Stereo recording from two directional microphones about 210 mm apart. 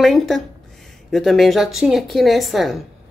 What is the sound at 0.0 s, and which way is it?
Speech, centre (ahead or behind).